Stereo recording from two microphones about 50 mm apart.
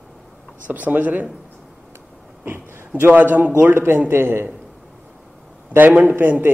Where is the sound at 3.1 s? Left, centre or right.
Right.